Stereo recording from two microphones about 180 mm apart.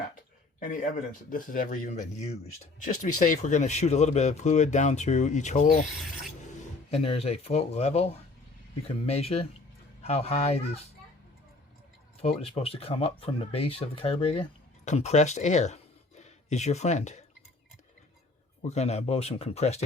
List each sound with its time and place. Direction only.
1.3 s speech: 50° left (ahead or behind)
5.6 s rub: centre (ahead or behind)
6.9 s speech: 35° left (ahead or behind)
12.2 s speech: 35° left (ahead or behind)
18.6 s speech: 35° left (ahead or behind)